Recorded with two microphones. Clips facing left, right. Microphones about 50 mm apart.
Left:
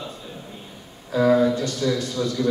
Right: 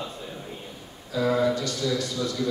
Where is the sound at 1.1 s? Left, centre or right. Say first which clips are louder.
Left 6 dB; left.